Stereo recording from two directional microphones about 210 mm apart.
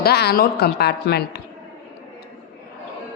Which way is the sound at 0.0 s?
50° left (ahead or behind).